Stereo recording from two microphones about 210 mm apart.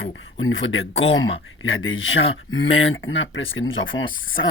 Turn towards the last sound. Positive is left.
turn(degrees=65)  # may be behind; listen again after turning